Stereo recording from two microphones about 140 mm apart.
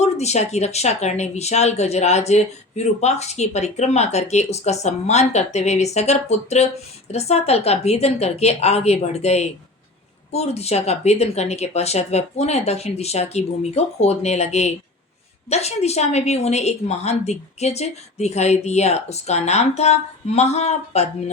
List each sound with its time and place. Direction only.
0.0 s speech: 50° left (ahead or behind)